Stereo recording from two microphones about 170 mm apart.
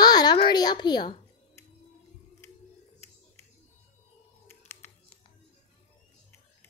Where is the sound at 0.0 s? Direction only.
25° left (ahead or behind).